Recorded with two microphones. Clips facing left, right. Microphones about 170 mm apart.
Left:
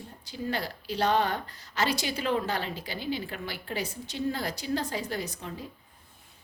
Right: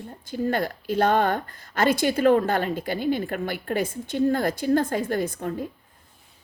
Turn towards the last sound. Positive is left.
turn(degrees=-50)  # may be behind; listen again after turning